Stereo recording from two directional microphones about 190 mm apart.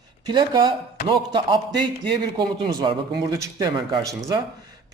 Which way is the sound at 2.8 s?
20° right (ahead or behind).